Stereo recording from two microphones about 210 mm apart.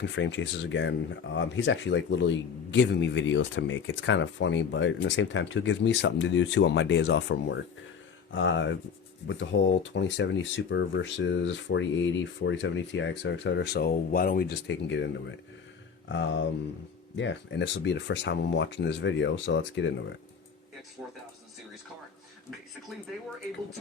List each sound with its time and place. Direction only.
0.0 s speech: 60° left (ahead or behind)